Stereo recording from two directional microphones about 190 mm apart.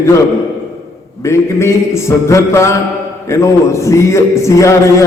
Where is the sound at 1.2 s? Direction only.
15° left (ahead or behind).